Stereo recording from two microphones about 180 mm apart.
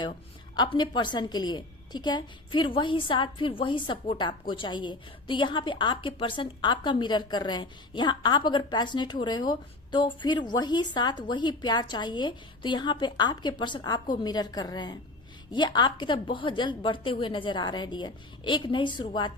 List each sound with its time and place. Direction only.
0.5 s a woman's voice: 25° left (ahead or behind)